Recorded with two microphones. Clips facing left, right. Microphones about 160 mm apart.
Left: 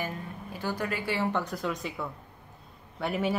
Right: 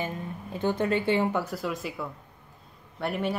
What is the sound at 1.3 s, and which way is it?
Speech, 5° right (ahead or behind).